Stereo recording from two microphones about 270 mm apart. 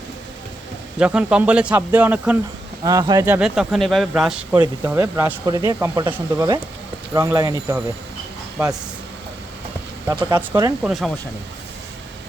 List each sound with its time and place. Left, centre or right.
0.9 s speech: centre
10.1 s speech: centre
10.8 s speech: centre